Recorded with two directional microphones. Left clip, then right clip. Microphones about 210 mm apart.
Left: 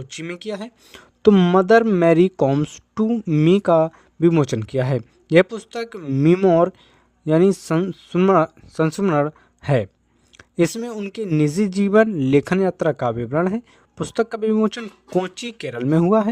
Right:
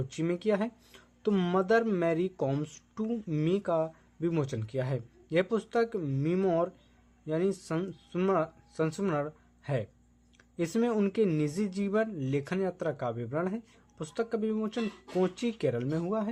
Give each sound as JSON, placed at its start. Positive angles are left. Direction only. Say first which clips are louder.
{"t": 0.1, "sound": "speech", "louder": "left 1 dB", "side_deg": 50}
{"t": 10.3, "sound": "a sound", "louder": "left 15 dB", "side_deg": 50}
{"t": 10.8, "sound": "speech", "louder": "even", "side_deg": 5}
{"t": 11.3, "sound": "speech", "louder": "left 11 dB", "side_deg": 50}